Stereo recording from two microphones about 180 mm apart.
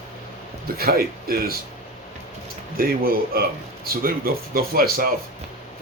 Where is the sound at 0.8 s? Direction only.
55° right (ahead or behind).